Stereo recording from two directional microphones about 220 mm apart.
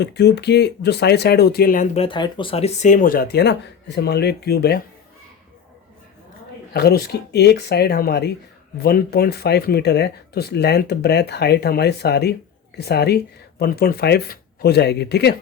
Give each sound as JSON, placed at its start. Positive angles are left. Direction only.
{"t": 0.0, "sound": "speech", "side_deg": 50}
{"t": 6.7, "sound": "speech", "side_deg": 45}